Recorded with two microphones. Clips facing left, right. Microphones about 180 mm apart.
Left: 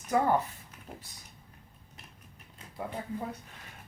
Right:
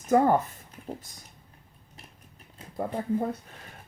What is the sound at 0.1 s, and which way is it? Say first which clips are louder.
Speech: right 5 dB; 45° right (ahead or behind).